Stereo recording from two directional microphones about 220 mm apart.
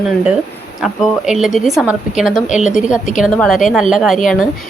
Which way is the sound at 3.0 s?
35° left (ahead or behind).